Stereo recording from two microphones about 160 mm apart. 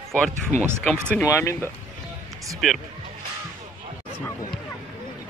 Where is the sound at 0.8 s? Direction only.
5° left (ahead or behind).